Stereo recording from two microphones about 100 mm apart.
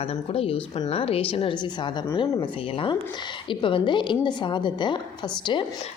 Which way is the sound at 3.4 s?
60° left (ahead or behind).